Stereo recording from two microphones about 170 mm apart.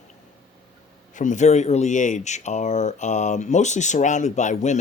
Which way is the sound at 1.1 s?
45° left (ahead or behind).